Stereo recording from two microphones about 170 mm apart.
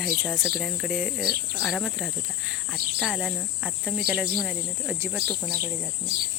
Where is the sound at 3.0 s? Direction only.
5° right (ahead or behind).